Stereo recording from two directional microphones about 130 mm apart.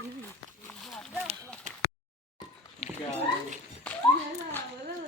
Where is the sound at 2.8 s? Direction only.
50° left (ahead or behind).